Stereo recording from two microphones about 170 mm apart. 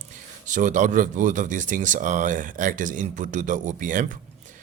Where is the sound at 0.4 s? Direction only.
45° right (ahead or behind).